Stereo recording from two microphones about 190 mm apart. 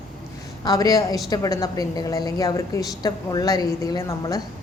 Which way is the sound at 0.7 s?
20° left (ahead or behind).